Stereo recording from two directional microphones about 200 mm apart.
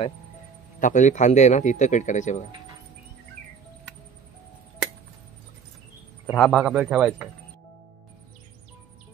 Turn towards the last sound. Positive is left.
turn(degrees=-5)  # may be behind; listen again after turning